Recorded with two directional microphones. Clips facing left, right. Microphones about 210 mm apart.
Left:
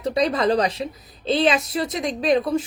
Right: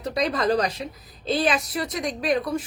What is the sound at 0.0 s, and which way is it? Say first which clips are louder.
A woman's voice: left 4 dB; 25° left (ahead or behind).